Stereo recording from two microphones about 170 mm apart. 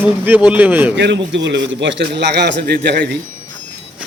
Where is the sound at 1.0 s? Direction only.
90° right.